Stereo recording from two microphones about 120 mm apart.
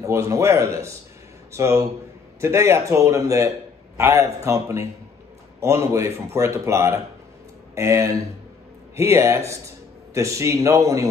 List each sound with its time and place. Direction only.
0.0 s a man's voice: 25° right (ahead or behind)